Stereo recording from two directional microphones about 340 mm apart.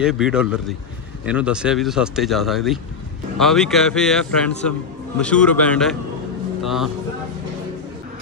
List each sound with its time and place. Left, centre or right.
0.0 s speech: centre